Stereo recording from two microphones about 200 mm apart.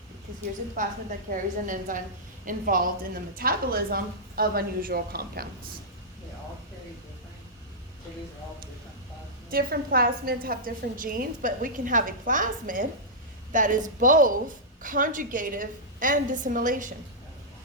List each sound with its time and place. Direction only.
0.8 s a woman's voice: 40° right (ahead or behind)
9.5 s a woman's voice: 50° right (ahead or behind)